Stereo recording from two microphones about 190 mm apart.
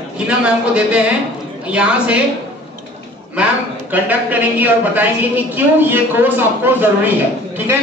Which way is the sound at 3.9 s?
10° right (ahead or behind).